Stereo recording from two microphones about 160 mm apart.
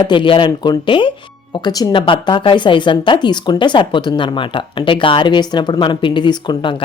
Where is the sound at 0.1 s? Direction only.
30° left (ahead or behind).